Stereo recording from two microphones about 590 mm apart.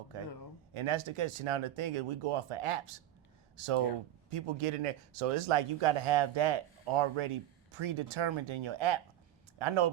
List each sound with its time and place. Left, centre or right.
0.7 s speech: right